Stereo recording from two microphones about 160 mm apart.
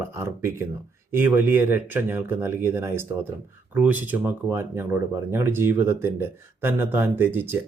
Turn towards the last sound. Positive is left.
turn(degrees=-15)  # may be behind; listen again after turning